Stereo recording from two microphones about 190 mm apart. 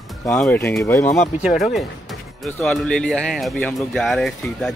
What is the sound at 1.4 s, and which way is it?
Speech, centre (ahead or behind).